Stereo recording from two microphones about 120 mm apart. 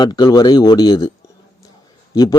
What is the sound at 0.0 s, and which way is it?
Speech, 35° left (ahead or behind).